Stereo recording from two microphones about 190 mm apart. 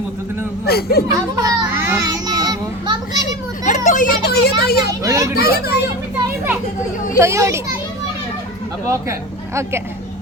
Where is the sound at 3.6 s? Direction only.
40° left (ahead or behind).